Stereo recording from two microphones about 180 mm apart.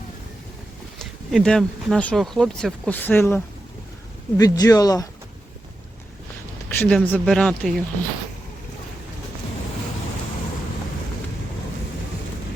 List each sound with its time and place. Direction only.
1.3 s speech: centre (ahead or behind); by 5.0 s 20° left (ahead or behind)
6.7 s speech: 10° left (ahead or behind)